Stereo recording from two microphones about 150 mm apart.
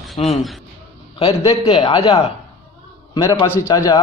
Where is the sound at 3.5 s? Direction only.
20° left (ahead or behind).